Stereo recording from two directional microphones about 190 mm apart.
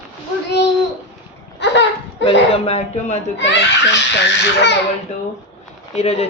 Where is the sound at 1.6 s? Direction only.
70° left (ahead or behind).